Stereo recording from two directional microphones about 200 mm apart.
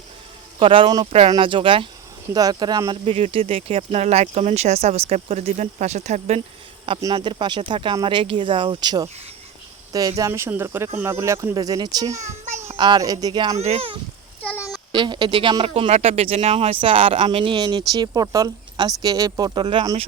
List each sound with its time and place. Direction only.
0.6 s speech: 25° right (ahead or behind)
6.8 s speech: 25° right (ahead or behind)
10.2 s a child's voice: 15° right (ahead or behind); by 13.9 s 30° right (ahead or behind)
14.9 s speech: 20° right (ahead or behind)